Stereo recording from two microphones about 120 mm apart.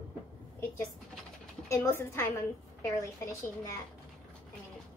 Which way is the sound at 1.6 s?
20° left (ahead or behind).